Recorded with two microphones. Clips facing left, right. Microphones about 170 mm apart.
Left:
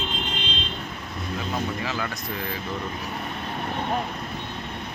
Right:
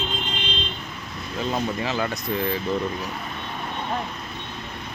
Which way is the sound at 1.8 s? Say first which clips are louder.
Right 4 dB; 20° right (ahead or behind).